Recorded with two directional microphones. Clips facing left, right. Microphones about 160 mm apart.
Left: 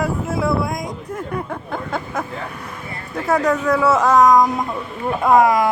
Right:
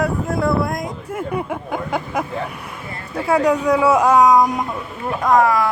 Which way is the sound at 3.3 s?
10° right (ahead or behind).